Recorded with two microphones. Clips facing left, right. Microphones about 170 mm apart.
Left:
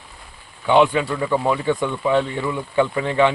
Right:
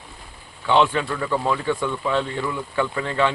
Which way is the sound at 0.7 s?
15° left (ahead or behind).